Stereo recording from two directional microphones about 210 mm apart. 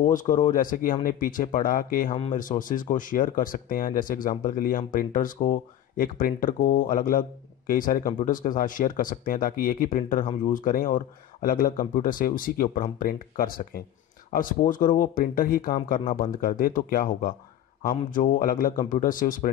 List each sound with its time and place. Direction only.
0.0 s speech: 40° left (ahead or behind)